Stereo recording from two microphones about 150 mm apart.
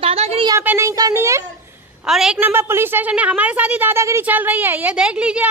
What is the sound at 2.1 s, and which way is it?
Speech, 5° right (ahead or behind).